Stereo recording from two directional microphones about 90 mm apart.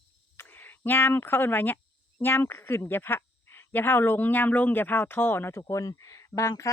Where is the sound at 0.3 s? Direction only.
20° left (ahead or behind).